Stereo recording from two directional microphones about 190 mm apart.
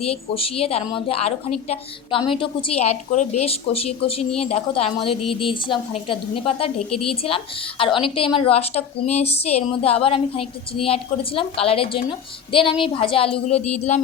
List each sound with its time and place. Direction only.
0.0 s a woman's voice: 30° left (ahead or behind)